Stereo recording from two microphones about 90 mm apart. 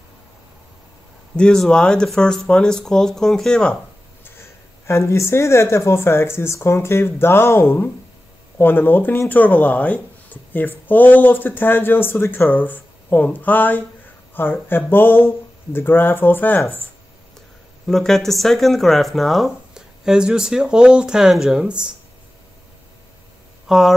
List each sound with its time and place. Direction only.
1.3 s speech: 10° left (ahead or behind)
4.2 s speech: 30° left (ahead or behind)
17.8 s speech: 5° left (ahead or behind)
23.7 s speech: 5° right (ahead or behind)